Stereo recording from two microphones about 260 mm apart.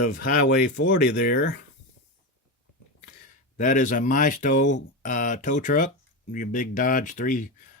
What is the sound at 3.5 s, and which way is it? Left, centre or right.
Speech, left.